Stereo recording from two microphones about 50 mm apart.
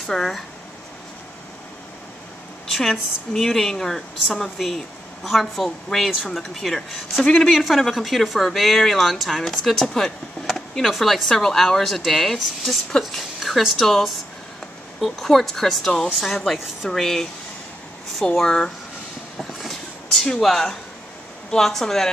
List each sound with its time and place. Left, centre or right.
0.0 s speech: centre
2.7 s a woman's voice: centre
18.2 s a woman's voice: centre
19.6 s a sound: centre
21.5 s a woman's voice: centre